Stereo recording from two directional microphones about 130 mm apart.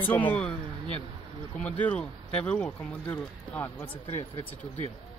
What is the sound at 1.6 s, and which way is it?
Speech, 10° left (ahead or behind).